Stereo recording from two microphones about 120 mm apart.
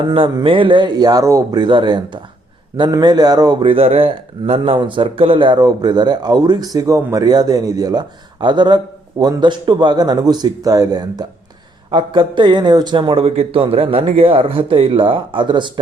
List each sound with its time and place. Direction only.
0.1 s speech: 45° right (ahead or behind); by 1.5 s 25° right (ahead or behind)
1.5 s a man's voice: 40° right (ahead or behind)